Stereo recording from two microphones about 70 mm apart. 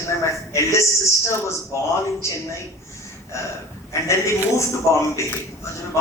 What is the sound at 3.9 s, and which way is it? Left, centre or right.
A man's voice, left.